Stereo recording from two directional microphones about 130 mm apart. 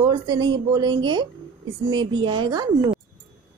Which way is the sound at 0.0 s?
30° right (ahead or behind).